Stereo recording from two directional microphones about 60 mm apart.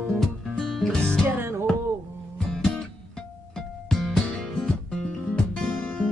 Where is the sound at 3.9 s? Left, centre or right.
Centre.